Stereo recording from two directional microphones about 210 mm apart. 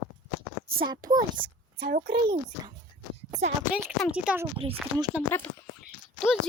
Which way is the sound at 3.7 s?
5° right (ahead or behind).